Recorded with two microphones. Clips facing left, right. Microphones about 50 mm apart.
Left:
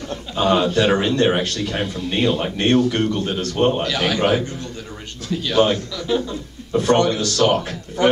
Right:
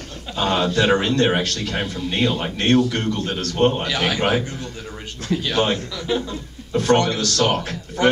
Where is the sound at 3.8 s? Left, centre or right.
Centre.